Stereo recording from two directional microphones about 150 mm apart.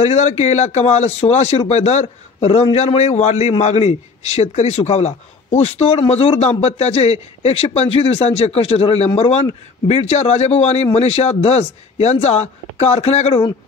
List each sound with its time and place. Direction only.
0.0 s a man's voice: 45° left (ahead or behind)